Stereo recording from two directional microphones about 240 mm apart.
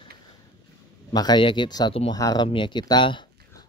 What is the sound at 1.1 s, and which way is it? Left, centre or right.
Speech, centre.